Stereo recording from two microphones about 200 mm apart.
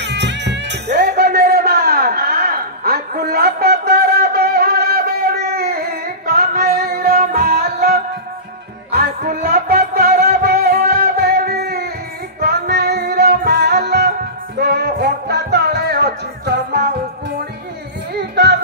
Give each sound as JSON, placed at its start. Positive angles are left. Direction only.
{"t": 0.0, "sound": "music", "side_deg": -60}
{"t": 18.3, "sound": "child singing", "side_deg": -55}